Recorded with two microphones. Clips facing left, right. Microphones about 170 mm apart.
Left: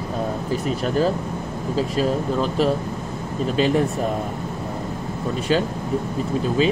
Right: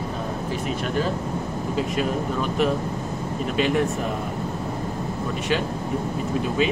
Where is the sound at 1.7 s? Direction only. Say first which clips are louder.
Left 4 dB; 30° left (ahead or behind).